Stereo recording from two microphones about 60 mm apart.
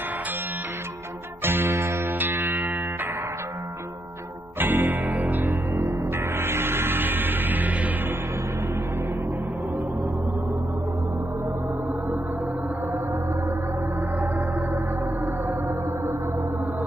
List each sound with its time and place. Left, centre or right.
1.4 s music: right
4.6 s music: right
5.5 s music: right